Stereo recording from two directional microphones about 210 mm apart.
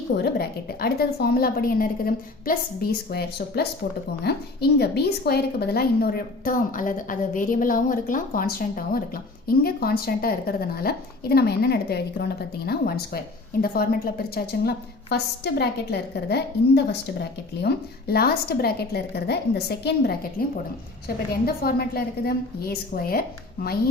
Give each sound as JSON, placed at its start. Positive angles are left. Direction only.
{"t": 0.2, "sound": "a woman's voice", "side_deg": 50}